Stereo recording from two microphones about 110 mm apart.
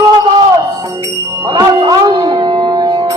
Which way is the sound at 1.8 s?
40° right (ahead or behind).